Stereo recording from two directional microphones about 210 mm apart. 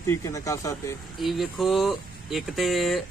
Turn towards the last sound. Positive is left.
turn(degrees=0)  # may be behind; listen again after turning